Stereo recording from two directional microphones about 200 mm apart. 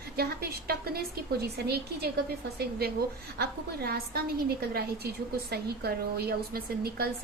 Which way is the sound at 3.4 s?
50° right (ahead or behind).